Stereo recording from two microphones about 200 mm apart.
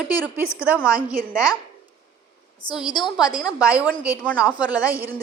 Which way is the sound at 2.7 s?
20° left (ahead or behind).